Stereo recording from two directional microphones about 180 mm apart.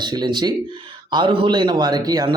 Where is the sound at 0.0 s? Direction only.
25° right (ahead or behind).